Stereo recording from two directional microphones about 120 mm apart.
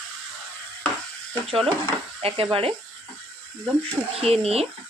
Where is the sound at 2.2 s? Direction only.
50° right (ahead or behind).